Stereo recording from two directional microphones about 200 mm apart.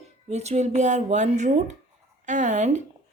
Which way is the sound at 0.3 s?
35° right (ahead or behind).